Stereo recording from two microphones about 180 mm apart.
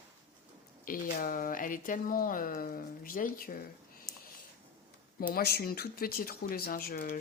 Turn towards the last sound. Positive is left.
turn(degrees=55)  # may be behind; listen again after turning